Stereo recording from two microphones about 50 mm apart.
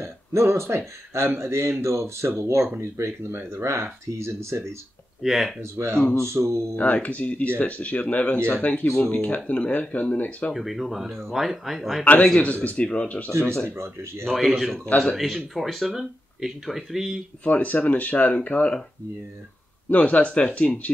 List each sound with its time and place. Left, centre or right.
0.0 s speech: right
5.2 s speech: centre
5.6 s speech: right
6.8 s speech: left
8.8 s speech: centre
9.2 s speech: left
10.5 s speech: centre
12.0 s speech: left
13.3 s speech: right
14.2 s speech: centre
17.5 s speech: left
19.9 s speech: left